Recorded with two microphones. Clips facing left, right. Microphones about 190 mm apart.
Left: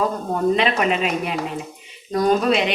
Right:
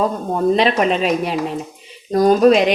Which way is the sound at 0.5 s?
35° right (ahead or behind).